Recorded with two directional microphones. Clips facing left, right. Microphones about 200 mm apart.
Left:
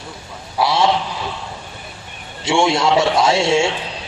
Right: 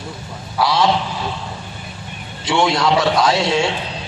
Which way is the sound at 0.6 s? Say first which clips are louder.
Even; 25° left (ahead or behind).